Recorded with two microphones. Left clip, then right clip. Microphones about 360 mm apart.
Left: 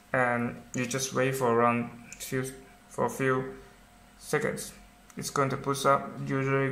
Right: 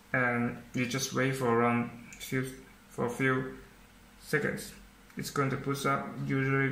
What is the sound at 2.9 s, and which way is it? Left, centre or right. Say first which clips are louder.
Speech: left 2 dB; centre.